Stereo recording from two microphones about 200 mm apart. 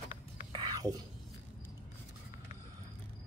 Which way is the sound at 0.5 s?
20° right (ahead or behind).